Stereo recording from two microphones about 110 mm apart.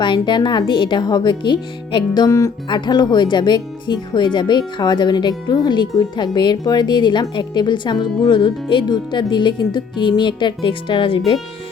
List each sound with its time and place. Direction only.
0.0 s speech: 45° left (ahead or behind)
2.6 s speech: 45° left (ahead or behind)